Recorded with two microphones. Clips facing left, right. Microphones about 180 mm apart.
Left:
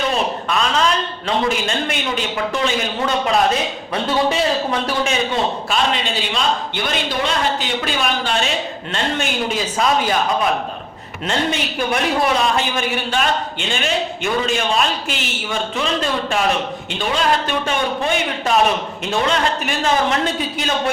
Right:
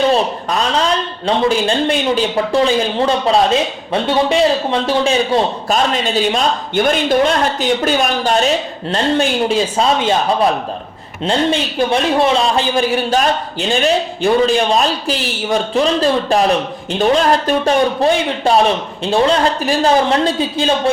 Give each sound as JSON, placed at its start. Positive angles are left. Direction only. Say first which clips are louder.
{"t": 0.1, "sound": "a man's voice", "louder": "right 5 dB", "side_deg": -35}
{"t": 4.7, "sound": "a man's voice", "louder": "right 5 dB", "side_deg": -30}